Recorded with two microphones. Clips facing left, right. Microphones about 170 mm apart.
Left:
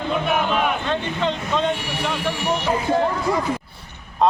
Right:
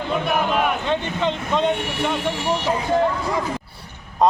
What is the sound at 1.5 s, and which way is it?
Speech, 20° right (ahead or behind).